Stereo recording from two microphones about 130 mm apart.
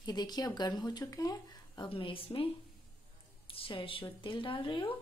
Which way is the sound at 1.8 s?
45° left (ahead or behind).